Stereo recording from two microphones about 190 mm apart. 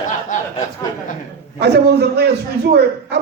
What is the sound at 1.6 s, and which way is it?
Speech, 60° right (ahead or behind).